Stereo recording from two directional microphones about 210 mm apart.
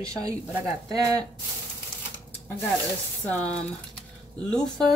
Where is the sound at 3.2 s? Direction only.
5° left (ahead or behind).